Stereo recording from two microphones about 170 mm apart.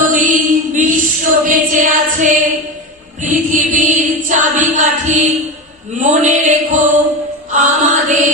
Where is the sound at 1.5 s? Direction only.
50° right (ahead or behind).